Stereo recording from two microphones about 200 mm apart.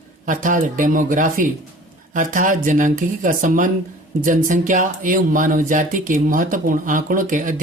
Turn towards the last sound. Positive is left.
turn(degrees=-40)  # may be behind; listen again after turning